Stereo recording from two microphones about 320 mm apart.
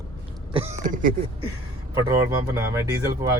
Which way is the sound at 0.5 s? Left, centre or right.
Right.